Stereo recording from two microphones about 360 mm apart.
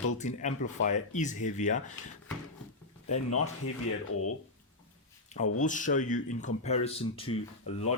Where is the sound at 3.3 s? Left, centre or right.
Left.